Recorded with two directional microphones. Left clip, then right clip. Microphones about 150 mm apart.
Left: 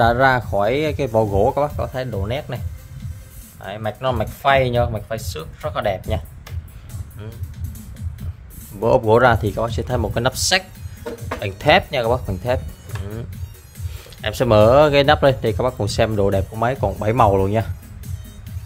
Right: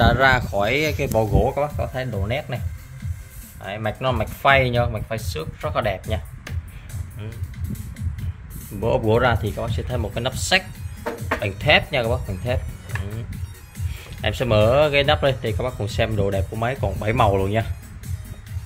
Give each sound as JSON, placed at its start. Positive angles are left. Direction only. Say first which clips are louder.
{"t": 0.0, "sound": "speech", "louder": "left 2 dB", "side_deg": 30}
{"t": 3.6, "sound": "speech", "louder": "left 1 dB", "side_deg": 15}
{"t": 8.7, "sound": "speech", "louder": "left 5 dB", "side_deg": 40}
{"t": 14.2, "sound": "speech", "louder": "left 5 dB", "side_deg": 40}